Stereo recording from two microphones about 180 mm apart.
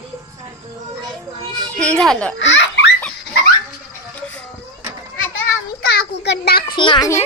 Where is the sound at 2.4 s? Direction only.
90° left.